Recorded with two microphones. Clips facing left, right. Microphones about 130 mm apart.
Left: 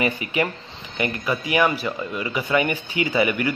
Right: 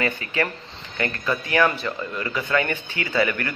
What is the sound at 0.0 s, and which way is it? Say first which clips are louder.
A man's voice: left 2 dB; 15° left (ahead or behind).